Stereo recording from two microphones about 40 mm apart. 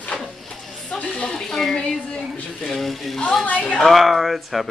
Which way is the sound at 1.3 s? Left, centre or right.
Centre.